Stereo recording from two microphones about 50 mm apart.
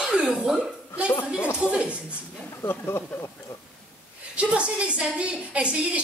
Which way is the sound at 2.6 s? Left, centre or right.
Left.